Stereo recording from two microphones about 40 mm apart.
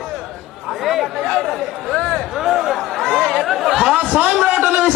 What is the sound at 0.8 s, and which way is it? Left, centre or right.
Chatter, centre.